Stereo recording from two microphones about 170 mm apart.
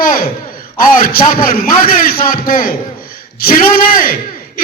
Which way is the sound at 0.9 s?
55° left (ahead or behind).